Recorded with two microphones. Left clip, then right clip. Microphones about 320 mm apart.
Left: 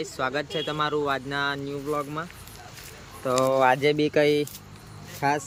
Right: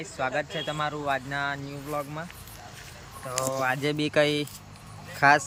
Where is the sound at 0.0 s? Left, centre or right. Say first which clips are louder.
Left 1 dB; centre.